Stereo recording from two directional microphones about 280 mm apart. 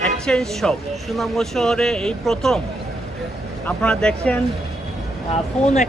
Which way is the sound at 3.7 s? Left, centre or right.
Centre.